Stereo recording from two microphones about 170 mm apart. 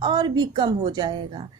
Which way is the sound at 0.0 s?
25° right (ahead or behind).